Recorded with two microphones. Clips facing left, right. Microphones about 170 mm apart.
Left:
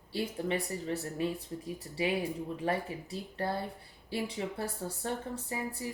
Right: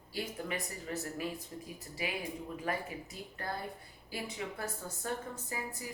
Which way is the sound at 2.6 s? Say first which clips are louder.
Left 5 dB; 30° left (ahead or behind).